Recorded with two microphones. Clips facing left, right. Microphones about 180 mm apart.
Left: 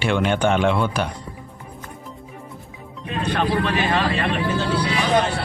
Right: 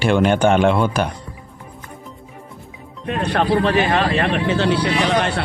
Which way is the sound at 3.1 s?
60° right (ahead or behind).